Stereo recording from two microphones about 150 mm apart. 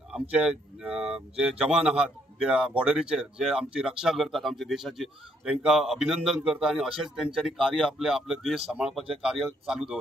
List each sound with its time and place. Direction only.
0.1 s speech: 5° right (ahead or behind)